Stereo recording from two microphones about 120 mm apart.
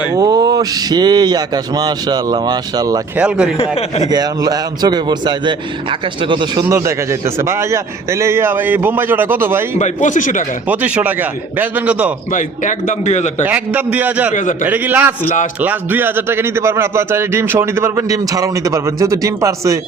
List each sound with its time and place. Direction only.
0.2 s speech: 30° right (ahead or behind)
3.2 s speech: 10° right (ahead or behind)
3.6 s speech: 60° left (ahead or behind)
4.1 s speech: 35° right (ahead or behind)
6.7 s a man's voice: 25° right (ahead or behind)
9.7 s speech: 85° left
10.7 s speech: 10° right (ahead or behind)
12.3 s a man's voice: 90° left; by 13.3 s 75° left (ahead or behind)
13.4 s speech: 15° right (ahead or behind)
14.3 s speech: 90° left
14.7 s a man's voice: 15° right (ahead or behind)